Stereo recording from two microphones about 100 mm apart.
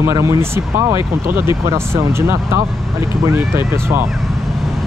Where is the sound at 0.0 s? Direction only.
30° right (ahead or behind).